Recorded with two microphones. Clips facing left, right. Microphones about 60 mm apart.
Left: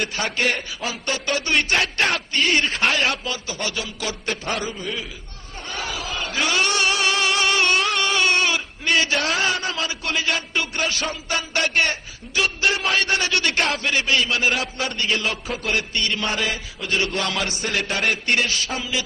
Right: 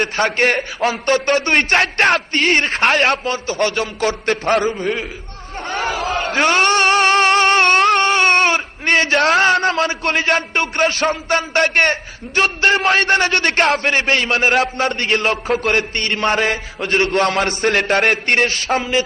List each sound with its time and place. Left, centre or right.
0.0 s a man's voice: right